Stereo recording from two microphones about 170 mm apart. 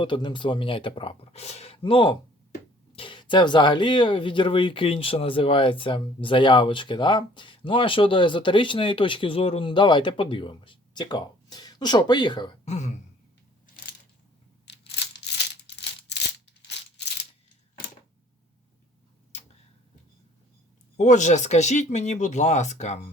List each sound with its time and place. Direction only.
0.0 s speech: 30° left (ahead or behind)
12.6 s speech: 40° left (ahead or behind)
15.2 s crumpling: 80° left
20.9 s speech: 45° left (ahead or behind)